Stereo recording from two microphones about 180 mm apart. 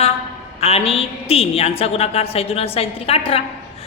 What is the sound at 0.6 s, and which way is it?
A woman's voice, 35° left (ahead or behind).